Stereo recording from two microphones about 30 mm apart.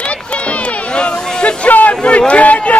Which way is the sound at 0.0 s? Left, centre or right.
Left.